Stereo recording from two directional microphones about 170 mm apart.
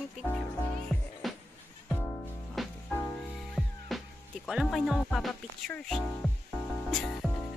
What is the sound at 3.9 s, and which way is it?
Music, centre (ahead or behind).